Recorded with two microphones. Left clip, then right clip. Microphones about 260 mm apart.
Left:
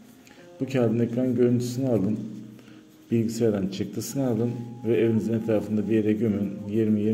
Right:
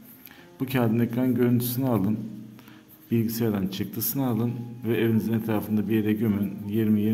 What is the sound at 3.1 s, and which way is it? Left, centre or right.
A man's voice, centre.